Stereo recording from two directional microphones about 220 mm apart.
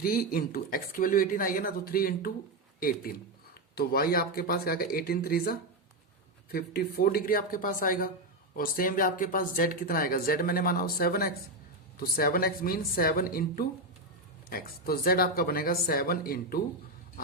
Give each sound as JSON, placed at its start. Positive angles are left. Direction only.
{"t": 0.0, "sound": "speech", "side_deg": 45}